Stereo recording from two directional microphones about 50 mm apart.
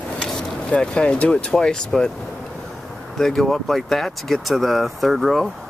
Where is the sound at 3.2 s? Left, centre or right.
Centre.